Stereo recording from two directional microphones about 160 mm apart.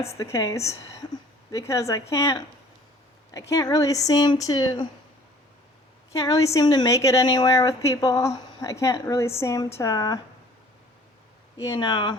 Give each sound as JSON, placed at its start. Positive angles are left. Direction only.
{"t": 0.2, "sound": "a woman's voice", "side_deg": 20}
{"t": 3.5, "sound": "a woman's voice", "side_deg": 25}
{"t": 6.1, "sound": "a woman's voice", "side_deg": 20}
{"t": 11.6, "sound": "a woman's voice", "side_deg": 25}